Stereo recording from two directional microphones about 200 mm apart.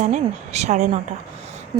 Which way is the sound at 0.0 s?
35° right (ahead or behind).